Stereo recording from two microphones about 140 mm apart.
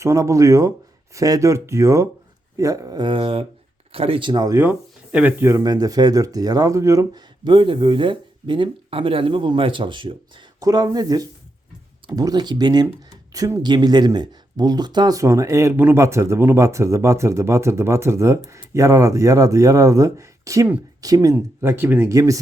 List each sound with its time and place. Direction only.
0.0 s speech: 20° right (ahead or behind)
4.5 s speech: 15° right (ahead or behind)
21.3 s speech: 15° right (ahead or behind)
22.1 s speech: 25° right (ahead or behind)